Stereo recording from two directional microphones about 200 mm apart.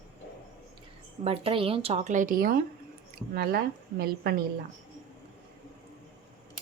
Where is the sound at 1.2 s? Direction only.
25° right (ahead or behind); by 4.3 s 50° right (ahead or behind).